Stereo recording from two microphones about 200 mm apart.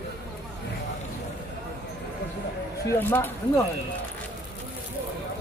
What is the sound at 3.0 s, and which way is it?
Speech, 10° left (ahead or behind).